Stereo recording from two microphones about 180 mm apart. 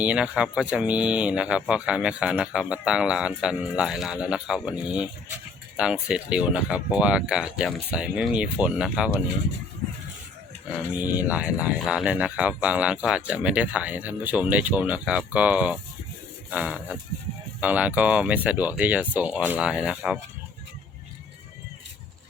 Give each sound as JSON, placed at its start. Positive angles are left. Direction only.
{"t": 0.0, "sound": "speech", "side_deg": -5}
{"t": 11.1, "sound": "speech", "side_deg": -10}